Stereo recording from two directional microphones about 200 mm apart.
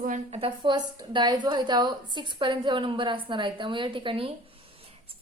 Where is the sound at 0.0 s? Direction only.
35° right (ahead or behind).